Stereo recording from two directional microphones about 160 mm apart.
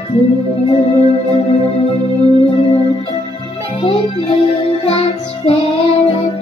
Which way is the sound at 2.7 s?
35° left (ahead or behind).